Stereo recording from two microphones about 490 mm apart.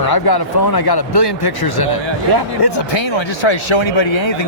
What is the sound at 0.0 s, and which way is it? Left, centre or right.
Speech, left.